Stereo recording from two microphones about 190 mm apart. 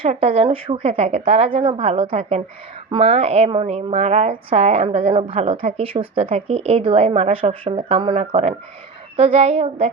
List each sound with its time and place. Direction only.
0.0 s a woman's voice: 30° right (ahead or behind)